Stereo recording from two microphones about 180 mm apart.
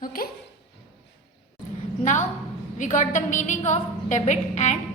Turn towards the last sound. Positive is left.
turn(degrees=40)  # may be behind; listen again after turning